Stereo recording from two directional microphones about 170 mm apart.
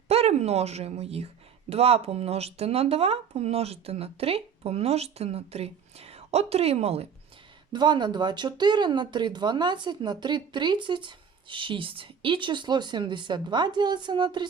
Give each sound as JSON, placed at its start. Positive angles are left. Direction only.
{"t": 0.1, "sound": "speech", "side_deg": -40}
{"t": 7.7, "sound": "speech", "side_deg": -25}